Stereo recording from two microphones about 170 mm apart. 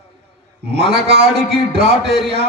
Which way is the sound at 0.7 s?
75° right (ahead or behind).